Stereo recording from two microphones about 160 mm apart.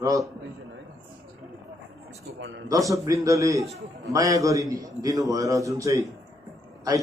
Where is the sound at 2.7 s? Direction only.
20° right (ahead or behind).